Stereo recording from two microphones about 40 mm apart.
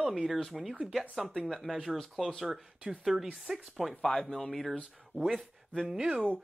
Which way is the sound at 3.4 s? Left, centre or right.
Centre.